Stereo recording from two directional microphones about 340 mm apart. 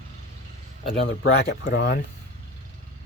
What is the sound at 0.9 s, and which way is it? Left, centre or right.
Speech, left.